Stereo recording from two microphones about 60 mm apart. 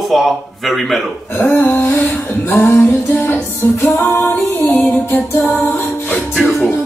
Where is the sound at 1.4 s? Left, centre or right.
Left.